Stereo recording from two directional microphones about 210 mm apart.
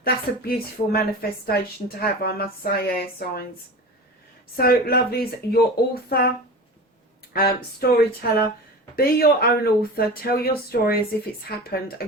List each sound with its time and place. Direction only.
0.0 s speech: 45° left (ahead or behind)
4.5 s speech: 45° left (ahead or behind)
7.3 s speech: 45° left (ahead or behind)